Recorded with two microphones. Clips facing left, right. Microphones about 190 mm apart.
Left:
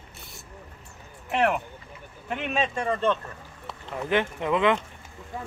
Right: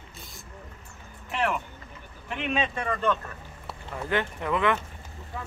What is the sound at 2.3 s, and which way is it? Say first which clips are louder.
Speech: left 1 dB; 45° left (ahead or behind).